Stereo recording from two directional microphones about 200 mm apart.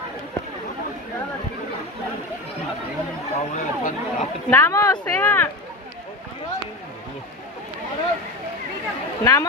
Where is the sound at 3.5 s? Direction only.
40° left (ahead or behind).